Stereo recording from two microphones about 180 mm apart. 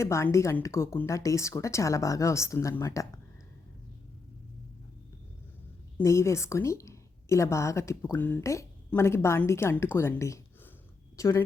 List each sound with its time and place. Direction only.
0.0 s a woman's voice: 15° left (ahead or behind)
6.0 s a woman's voice: 15° left (ahead or behind)